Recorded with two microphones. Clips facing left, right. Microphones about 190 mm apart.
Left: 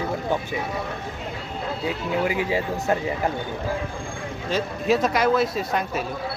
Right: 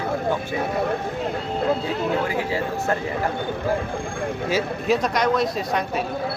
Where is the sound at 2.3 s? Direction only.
15° left (ahead or behind).